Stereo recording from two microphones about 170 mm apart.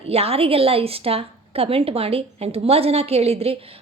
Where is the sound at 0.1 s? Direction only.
35° right (ahead or behind).